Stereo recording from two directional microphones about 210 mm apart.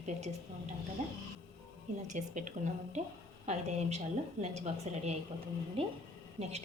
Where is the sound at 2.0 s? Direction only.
35° right (ahead or behind).